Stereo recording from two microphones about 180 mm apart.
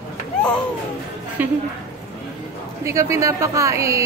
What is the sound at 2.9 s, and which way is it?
Speech, 15° right (ahead or behind).